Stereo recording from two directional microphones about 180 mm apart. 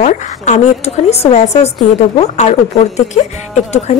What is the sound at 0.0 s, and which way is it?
A woman's voice, 40° left (ahead or behind).